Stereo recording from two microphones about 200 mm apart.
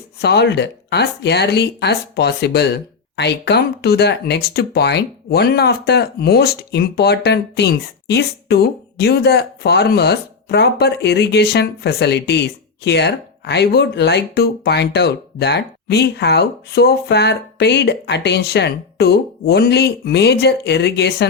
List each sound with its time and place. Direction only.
0.2 s speech: 55° left (ahead or behind)